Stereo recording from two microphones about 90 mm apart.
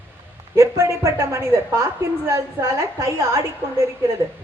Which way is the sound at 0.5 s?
35° right (ahead or behind).